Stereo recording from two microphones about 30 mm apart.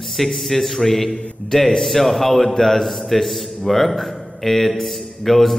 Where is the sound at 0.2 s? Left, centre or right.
Centre.